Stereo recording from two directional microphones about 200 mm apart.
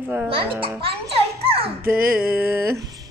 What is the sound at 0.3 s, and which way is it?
Speech, 25° right (ahead or behind).